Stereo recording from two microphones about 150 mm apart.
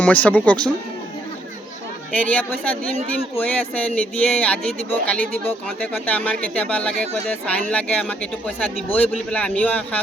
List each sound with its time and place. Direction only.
0.0 s speech: 10° left (ahead or behind)
2.1 s speech: 10° left (ahead or behind)